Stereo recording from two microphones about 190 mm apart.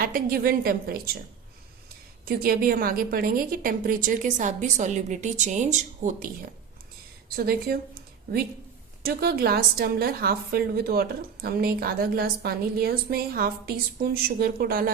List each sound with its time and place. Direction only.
0.0 s a woman's voice: 50° right (ahead or behind)
2.2 s a woman's voice: 50° right (ahead or behind)
7.3 s a woman's voice: 50° right (ahead or behind)
9.0 s a woman's voice: 55° right (ahead or behind)